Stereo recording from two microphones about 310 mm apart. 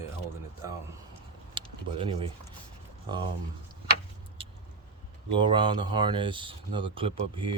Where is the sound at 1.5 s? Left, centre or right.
Centre.